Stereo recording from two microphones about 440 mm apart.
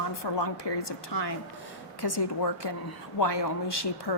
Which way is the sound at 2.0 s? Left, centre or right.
Left.